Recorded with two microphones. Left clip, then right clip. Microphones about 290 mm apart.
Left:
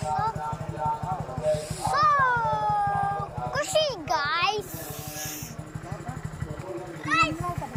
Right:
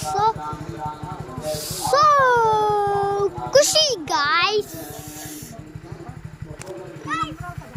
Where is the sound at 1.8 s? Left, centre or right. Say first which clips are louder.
Right 7 dB; centre.